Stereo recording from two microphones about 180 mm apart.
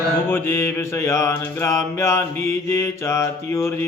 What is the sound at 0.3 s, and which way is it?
Mantra, 15° left (ahead or behind).